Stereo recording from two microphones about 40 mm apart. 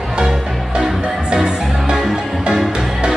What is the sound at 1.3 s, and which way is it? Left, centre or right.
Music, right.